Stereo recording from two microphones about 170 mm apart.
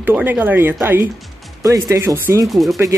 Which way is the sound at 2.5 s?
Centre (ahead or behind).